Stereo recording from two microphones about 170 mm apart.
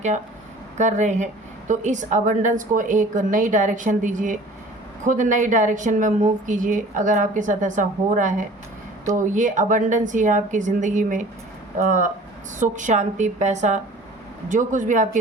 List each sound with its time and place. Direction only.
0.8 s a woman's voice: 45° right (ahead or behind)